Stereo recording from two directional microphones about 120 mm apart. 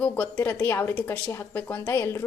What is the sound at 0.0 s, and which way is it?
A woman's voice, 15° left (ahead or behind).